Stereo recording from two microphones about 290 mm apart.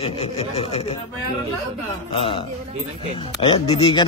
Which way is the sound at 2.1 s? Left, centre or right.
Centre.